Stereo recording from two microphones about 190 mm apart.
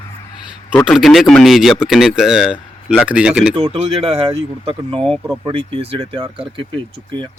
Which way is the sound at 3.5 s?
30° right (ahead or behind).